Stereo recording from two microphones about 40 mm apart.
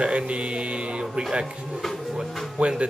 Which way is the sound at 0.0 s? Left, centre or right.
Right.